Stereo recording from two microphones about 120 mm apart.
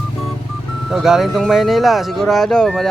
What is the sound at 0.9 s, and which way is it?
Speech, 5° right (ahead or behind).